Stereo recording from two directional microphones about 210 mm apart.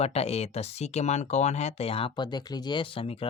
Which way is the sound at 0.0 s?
30° left (ahead or behind).